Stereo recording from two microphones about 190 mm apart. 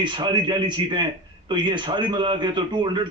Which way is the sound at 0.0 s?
25° right (ahead or behind).